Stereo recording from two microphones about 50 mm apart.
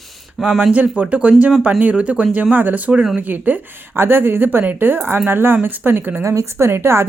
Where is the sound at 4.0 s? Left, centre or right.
Right.